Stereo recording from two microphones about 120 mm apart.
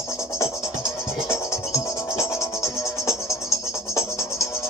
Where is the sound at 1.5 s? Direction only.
25° left (ahead or behind).